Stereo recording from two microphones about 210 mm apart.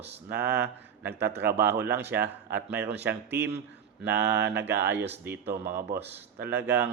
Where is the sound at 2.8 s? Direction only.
55° right (ahead or behind).